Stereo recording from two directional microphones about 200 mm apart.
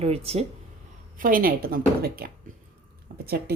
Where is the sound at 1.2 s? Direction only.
45° right (ahead or behind).